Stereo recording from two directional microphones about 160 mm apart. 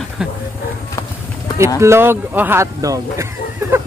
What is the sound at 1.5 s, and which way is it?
Speech, 15° right (ahead or behind).